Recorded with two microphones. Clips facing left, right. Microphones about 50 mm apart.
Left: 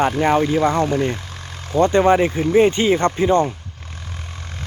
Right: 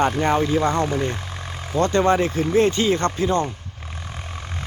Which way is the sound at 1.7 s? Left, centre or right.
Centre.